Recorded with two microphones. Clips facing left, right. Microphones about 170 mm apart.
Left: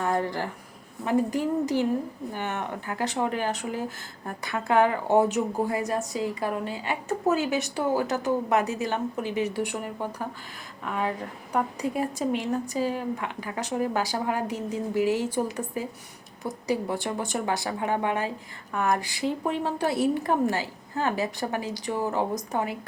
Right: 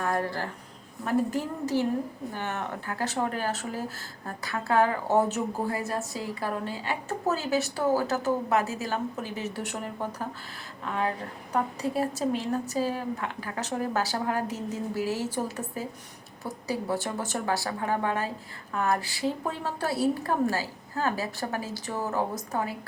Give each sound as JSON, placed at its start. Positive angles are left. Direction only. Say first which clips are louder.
{"t": 0.0, "sound": "a woman's voice", "louder": "left 2 dB", "side_deg": 20}